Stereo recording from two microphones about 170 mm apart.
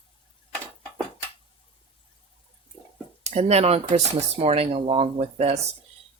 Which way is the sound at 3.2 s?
40° right (ahead or behind).